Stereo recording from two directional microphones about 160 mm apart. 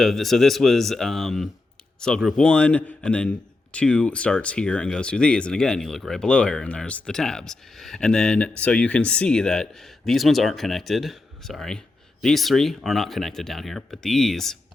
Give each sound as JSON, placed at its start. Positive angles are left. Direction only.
{"t": 0.0, "sound": "a man's voice", "side_deg": 0}